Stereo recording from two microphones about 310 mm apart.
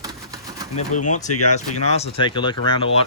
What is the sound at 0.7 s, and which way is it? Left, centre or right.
Speech, left.